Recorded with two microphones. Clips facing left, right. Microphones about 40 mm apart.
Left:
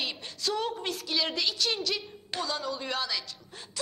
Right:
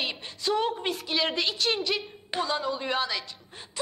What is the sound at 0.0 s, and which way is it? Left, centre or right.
A woman's voice, centre.